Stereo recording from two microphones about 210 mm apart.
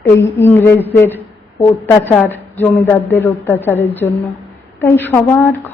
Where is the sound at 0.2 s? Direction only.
10° left (ahead or behind).